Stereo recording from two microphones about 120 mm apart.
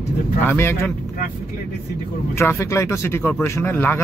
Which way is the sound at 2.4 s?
25° left (ahead or behind).